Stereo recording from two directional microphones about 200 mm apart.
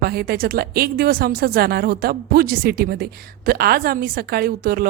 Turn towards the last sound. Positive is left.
turn(degrees=-50)  # may be behind; listen again after turning